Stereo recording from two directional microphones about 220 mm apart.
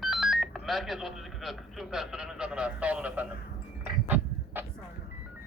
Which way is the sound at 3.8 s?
10° right (ahead or behind).